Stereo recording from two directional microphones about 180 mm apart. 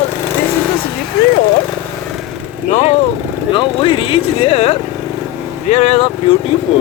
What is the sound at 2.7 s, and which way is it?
Speech, 40° left (ahead or behind).